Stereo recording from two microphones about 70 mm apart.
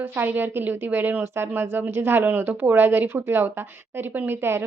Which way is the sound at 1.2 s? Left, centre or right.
Right.